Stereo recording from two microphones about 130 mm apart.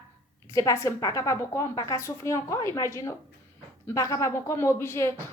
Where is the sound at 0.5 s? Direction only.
25° left (ahead or behind).